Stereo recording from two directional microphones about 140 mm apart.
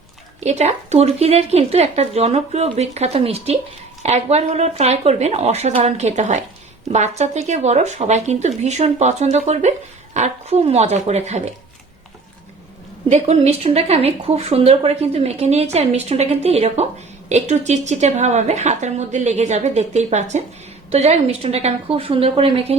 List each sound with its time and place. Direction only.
0.3 s speech: 55° right (ahead or behind)
13.1 s a woman's voice: 55° right (ahead or behind)